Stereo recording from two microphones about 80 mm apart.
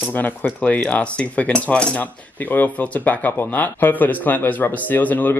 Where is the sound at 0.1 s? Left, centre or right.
Left.